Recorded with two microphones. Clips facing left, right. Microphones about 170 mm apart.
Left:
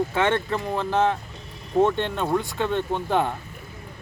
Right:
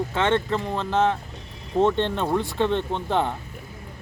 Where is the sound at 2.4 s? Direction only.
30° right (ahead or behind).